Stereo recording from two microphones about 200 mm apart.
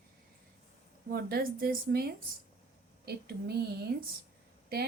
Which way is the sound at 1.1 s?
50° right (ahead or behind).